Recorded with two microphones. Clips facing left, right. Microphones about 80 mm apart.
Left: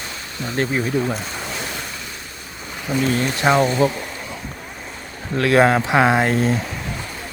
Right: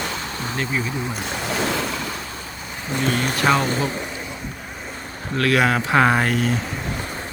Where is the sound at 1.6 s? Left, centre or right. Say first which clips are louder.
Right 7 dB; right.